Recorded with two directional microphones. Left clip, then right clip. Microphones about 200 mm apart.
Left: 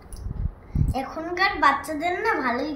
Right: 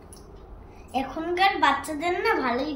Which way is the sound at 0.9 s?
Centre (ahead or behind).